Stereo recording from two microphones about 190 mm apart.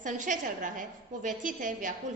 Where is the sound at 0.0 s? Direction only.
40° right (ahead or behind).